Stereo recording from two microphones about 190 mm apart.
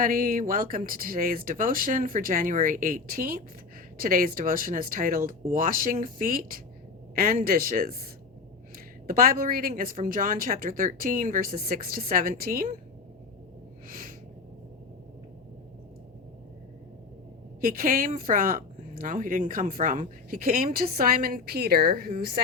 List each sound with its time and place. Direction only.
0.0 s a woman's voice: 45° right (ahead or behind)
9.0 s a woman's voice: 50° right (ahead or behind)
13.8 s a sound: 45° right (ahead or behind)
17.6 s a woman's voice: 45° right (ahead or behind)